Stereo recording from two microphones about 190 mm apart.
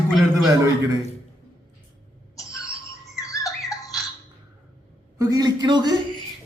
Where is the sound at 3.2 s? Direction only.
15° left (ahead or behind).